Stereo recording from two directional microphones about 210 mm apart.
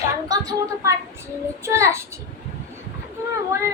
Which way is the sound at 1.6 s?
15° right (ahead or behind).